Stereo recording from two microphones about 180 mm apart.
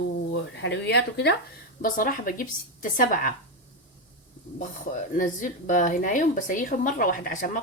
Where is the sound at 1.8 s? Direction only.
50° left (ahead or behind).